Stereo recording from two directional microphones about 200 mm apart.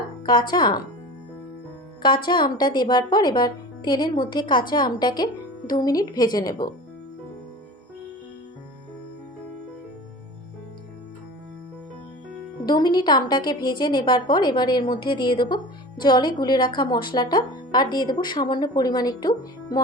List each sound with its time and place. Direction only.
0.5 s a woman's voice: 20° left (ahead or behind)
2.2 s a woman's voice: 25° left (ahead or behind)
12.6 s a woman's voice: 20° left (ahead or behind)